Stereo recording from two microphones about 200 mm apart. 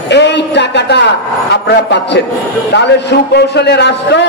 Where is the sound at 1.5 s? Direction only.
60° left (ahead or behind).